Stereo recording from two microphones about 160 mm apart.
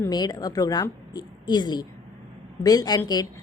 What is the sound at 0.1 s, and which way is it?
A woman's voice, 25° left (ahead or behind).